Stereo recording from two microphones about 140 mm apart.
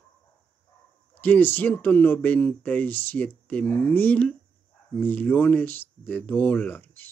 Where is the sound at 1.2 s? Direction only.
15° left (ahead or behind).